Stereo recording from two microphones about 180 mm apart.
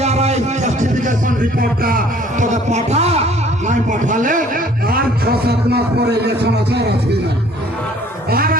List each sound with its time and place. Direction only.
0.0 s music: 35° right (ahead or behind)
3.7 s a man's voice: 45° right (ahead or behind); by 7.2 s 65° right (ahead or behind)
8.3 s a man's voice: 55° right (ahead or behind)